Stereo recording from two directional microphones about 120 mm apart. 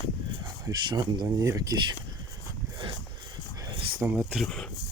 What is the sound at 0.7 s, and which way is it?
Speech, 35° right (ahead or behind).